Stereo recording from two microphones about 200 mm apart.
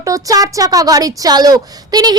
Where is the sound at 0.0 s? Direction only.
15° right (ahead or behind).